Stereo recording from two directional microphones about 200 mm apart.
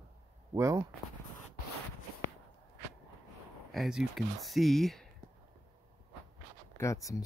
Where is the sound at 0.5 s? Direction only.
15° right (ahead or behind).